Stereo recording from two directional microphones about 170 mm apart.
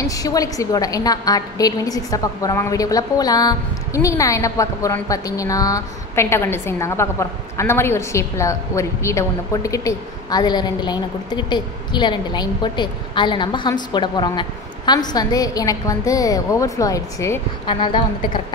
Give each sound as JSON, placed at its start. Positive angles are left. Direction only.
{"t": 0.0, "sound": "a woman's voice", "side_deg": 20}
{"t": 17.6, "sound": "a woman's voice", "side_deg": 30}